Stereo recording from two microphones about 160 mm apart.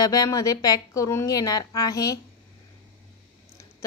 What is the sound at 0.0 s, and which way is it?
A woman's voice, 25° left (ahead or behind).